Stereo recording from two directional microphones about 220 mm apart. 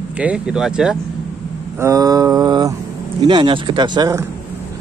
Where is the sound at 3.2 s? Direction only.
20° right (ahead or behind).